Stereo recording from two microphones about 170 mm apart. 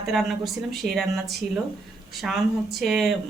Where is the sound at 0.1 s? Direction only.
Centre (ahead or behind).